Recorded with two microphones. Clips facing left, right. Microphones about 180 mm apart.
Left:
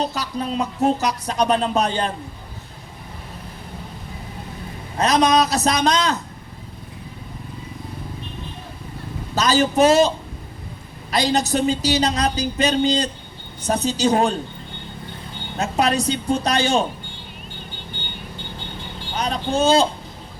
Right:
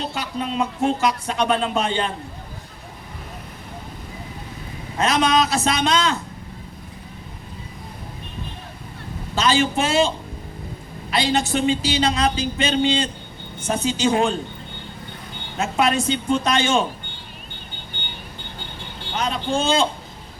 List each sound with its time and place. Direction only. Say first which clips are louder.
0.0 s speech: left 2 dB; 40° left (ahead or behind)
4.9 s speech: left 2 dB; 40° left (ahead or behind)
9.3 s speech: left 1 dB; 40° left (ahead or behind)
11.1 s speech: left 1 dB; 40° left (ahead or behind)
15.5 s speech: even; 40° left (ahead or behind)
19.1 s a man's voice: left 1 dB; 40° left (ahead or behind)